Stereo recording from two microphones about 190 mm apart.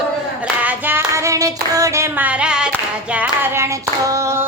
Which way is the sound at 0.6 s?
10° right (ahead or behind).